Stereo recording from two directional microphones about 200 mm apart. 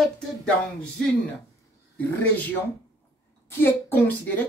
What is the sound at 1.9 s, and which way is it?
Speech, 10° left (ahead or behind).